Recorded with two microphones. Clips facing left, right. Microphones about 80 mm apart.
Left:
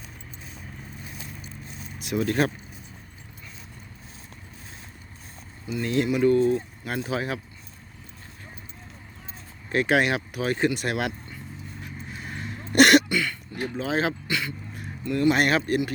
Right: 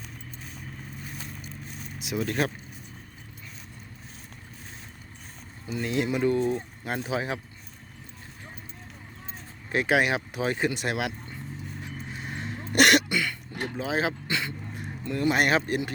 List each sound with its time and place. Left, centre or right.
2.0 s speech: centre
5.8 s speech: centre
6.1 s speech: right
9.6 s speech: centre
12.3 s a sound: right
12.7 s throat clearing: centre
13.1 s a sound: centre
13.5 s a sound: right
13.7 s speech: centre
14.3 s speech: right